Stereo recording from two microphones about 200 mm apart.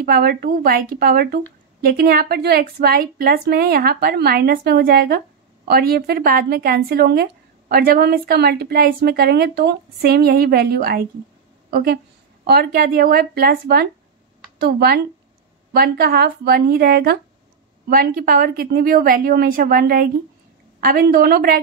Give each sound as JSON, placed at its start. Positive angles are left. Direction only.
{"t": 0.0, "sound": "a woman's voice", "side_deg": -50}